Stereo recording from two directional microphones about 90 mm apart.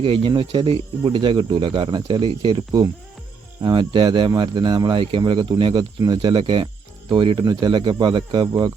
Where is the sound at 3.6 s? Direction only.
60° right (ahead or behind).